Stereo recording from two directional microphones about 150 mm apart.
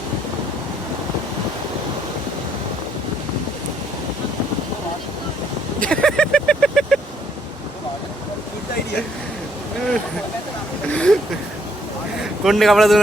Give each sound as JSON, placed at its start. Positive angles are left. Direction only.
{"t": 5.8, "sound": "vehicle", "side_deg": 5}
{"t": 10.9, "sound": "a sound", "side_deg": 5}
{"t": 12.4, "sound": "a man's voice", "side_deg": 0}